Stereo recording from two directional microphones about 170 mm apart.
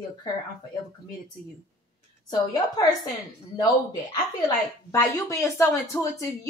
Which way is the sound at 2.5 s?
25° left (ahead or behind).